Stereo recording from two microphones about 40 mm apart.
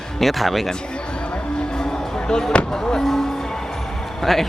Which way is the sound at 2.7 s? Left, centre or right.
Centre.